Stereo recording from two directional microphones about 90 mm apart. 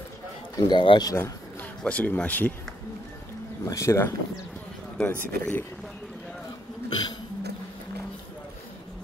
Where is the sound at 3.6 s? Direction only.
35° left (ahead or behind).